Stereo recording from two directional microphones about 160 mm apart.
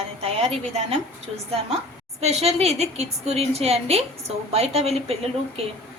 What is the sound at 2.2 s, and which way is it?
A woman's voice, 40° right (ahead or behind).